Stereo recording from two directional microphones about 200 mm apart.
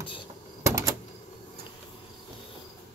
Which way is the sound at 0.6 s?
15° right (ahead or behind).